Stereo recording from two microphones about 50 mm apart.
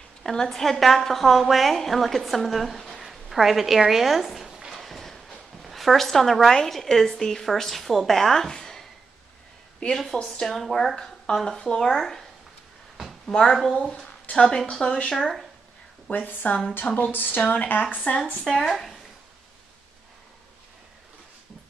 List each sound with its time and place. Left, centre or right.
0.2 s a woman's voice: centre
4.7 s a sound: centre
6.5 s a woman's voice: centre
10.4 s a woman's voice: centre
13.3 s a woman's voice: centre
16.1 s speech: left
18.6 s speech: centre